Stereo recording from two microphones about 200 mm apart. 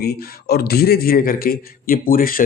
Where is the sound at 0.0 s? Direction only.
50° left (ahead or behind).